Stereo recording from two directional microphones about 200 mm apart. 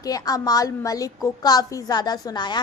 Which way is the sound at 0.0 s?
20° left (ahead or behind).